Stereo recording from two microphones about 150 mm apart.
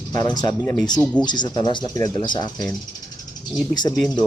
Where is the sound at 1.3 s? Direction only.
30° left (ahead or behind).